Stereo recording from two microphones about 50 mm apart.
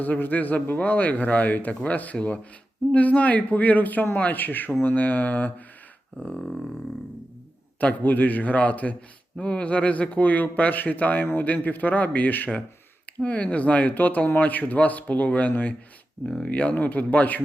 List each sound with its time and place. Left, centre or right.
0.0 s speech: left
7.8 s speech: left